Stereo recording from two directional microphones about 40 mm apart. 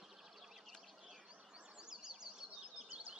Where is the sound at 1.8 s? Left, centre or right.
Centre.